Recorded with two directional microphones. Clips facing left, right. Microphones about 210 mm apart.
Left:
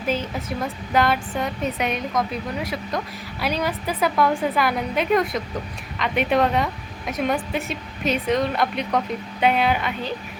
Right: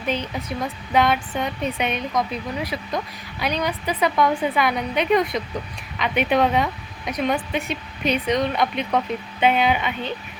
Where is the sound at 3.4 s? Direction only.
5° left (ahead or behind).